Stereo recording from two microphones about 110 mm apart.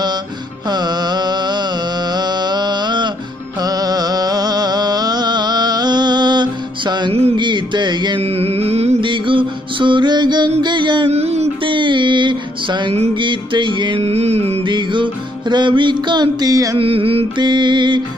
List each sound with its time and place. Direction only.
0.7 s music: 40° right (ahead or behind)
3.6 s a sound: 35° right (ahead or behind)
7.3 s music: 45° right (ahead or behind)
8.2 s music: 65° right (ahead or behind)
9.0 s music: 50° right (ahead or behind)
10.6 s a sound: 45° right (ahead or behind)
11.1 s music: 70° right (ahead or behind)
11.6 s music: 45° right (ahead or behind)
14.0 s music: 70° right (ahead or behind)
14.6 s music: 45° right (ahead or behind)
16.7 s music: 55° right (ahead or behind)
17.4 s music: 45° right (ahead or behind)